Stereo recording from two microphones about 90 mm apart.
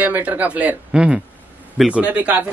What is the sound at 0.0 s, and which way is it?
Speech, 20° right (ahead or behind).